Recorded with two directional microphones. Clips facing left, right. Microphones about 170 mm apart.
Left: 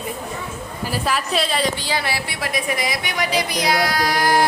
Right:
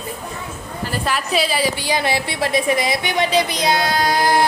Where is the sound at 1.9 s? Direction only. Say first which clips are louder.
Right 4 dB; 20° right (ahead or behind).